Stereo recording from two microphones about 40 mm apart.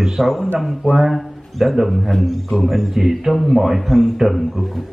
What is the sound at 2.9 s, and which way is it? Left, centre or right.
Speech, centre.